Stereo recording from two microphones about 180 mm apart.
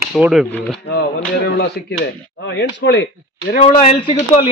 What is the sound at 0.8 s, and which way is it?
Speech, 60° left (ahead or behind).